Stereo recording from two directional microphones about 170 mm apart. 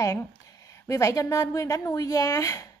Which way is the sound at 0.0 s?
20° left (ahead or behind).